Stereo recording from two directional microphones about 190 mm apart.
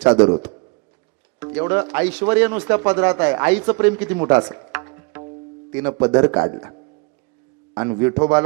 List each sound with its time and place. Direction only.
0.3 s a man's voice: 25° right (ahead or behind)
1.5 s speech: 15° right (ahead or behind)
4.7 s music: 15° right (ahead or behind)
5.7 s speech: 15° right (ahead or behind)